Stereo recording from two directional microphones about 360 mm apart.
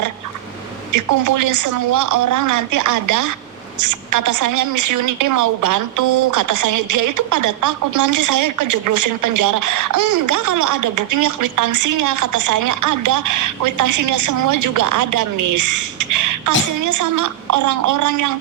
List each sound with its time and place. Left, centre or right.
0.9 s a woman's voice: right